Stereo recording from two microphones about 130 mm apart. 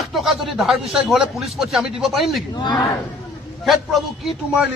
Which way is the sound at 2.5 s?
35° left (ahead or behind).